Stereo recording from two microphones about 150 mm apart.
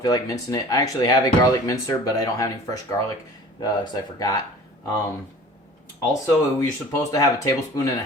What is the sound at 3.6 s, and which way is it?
Speech, 25° left (ahead or behind).